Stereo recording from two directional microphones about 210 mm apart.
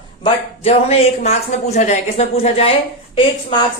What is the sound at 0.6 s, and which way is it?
Speech, 30° left (ahead or behind).